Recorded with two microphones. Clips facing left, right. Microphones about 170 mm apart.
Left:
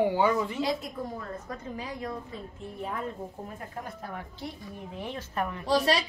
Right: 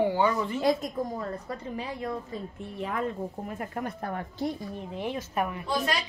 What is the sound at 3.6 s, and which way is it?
Speech, 60° right (ahead or behind).